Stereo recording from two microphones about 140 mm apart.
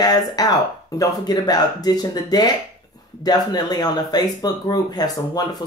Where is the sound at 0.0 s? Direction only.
25° left (ahead or behind).